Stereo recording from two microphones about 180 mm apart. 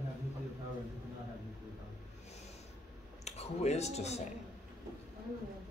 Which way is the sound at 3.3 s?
40° left (ahead or behind).